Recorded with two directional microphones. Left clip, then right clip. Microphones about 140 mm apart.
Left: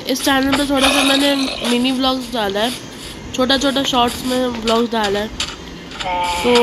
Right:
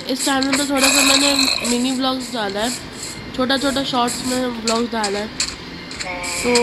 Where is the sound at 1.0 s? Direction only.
10° right (ahead or behind).